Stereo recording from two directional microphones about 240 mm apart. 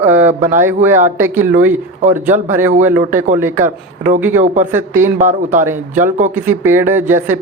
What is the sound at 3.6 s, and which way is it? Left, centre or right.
Speech, right.